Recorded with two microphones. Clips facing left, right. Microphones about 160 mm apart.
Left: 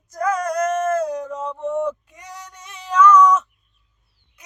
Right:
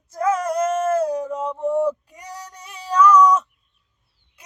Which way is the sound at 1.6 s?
35° right (ahead or behind).